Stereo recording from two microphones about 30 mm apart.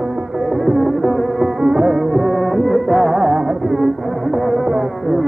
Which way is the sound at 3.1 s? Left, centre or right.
Centre.